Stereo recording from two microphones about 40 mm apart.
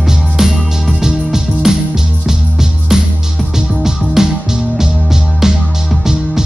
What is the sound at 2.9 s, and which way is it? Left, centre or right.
Music, centre.